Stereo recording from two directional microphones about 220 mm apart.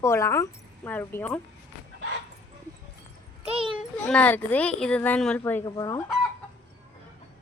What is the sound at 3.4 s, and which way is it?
Speech, 25° right (ahead or behind).